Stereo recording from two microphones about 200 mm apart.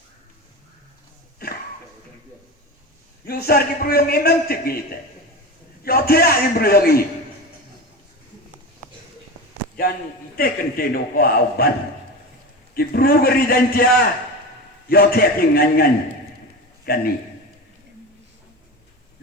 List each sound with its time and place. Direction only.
1.4 s a sound: 50° left (ahead or behind)
3.2 s a man's voice: 50° left (ahead or behind)
10.3 s a man's voice: 45° left (ahead or behind)
12.7 s a man's voice: 50° left (ahead or behind)
14.8 s a man's voice: 50° left (ahead or behind)